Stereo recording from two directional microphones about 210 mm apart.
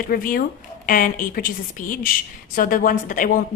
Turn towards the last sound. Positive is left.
turn(degrees=40)  # may be behind; listen again after turning